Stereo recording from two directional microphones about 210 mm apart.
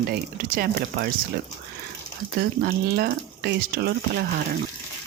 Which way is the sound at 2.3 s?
50° right (ahead or behind).